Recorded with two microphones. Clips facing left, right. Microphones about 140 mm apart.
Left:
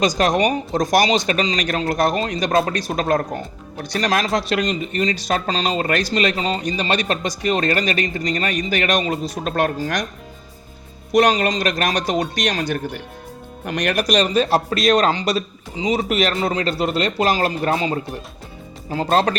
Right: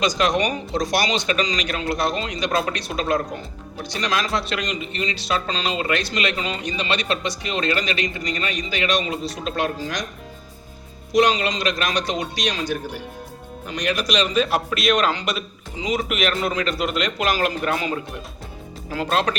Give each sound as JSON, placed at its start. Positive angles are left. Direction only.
{"t": 0.0, "sound": "a man's voice", "side_deg": 40}
{"t": 11.1, "sound": "a man's voice", "side_deg": 50}